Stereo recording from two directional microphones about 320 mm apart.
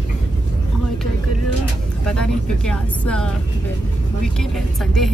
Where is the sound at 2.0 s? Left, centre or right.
Centre.